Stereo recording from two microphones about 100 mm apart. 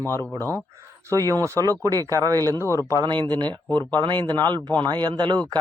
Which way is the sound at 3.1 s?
50° right (ahead or behind).